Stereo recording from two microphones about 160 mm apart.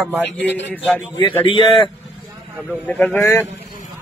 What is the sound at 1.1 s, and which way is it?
Speech, 30° left (ahead or behind).